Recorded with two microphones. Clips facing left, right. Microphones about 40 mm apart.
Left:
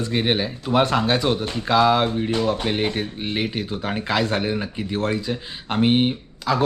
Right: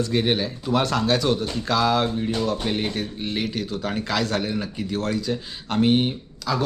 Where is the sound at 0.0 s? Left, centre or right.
Left.